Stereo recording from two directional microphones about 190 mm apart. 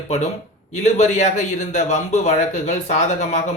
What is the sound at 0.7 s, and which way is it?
Speech, 40° left (ahead or behind).